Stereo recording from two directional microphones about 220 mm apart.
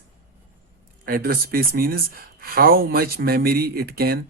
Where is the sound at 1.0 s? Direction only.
40° right (ahead or behind).